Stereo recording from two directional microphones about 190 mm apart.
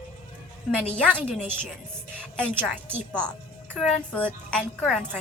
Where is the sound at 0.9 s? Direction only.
5° left (ahead or behind).